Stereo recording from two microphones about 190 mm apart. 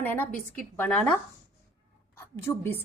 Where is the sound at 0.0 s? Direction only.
10° left (ahead or behind).